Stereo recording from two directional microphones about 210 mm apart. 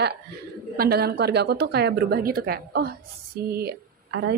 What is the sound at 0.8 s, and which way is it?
A woman's voice, 50° right (ahead or behind).